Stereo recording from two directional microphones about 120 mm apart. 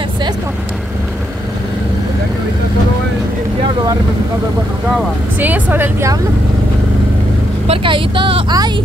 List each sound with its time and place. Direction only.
5.4 s speech: 15° right (ahead or behind)
7.6 s speech: 50° right (ahead or behind)
8.5 s speech: 35° right (ahead or behind)